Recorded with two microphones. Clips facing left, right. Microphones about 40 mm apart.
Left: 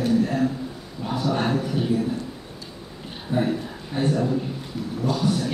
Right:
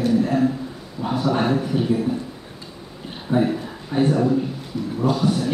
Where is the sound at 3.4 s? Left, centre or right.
Centre.